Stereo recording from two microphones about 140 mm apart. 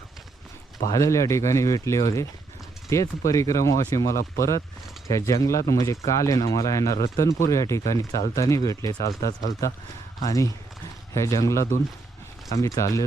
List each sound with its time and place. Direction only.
0.9 s speech: 20° left (ahead or behind)